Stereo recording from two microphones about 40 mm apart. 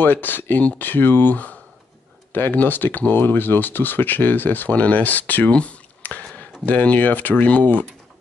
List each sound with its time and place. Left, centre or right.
0.0 s speech: left
2.5 s speech: left
5.5 s speech: left
6.0 s speech: left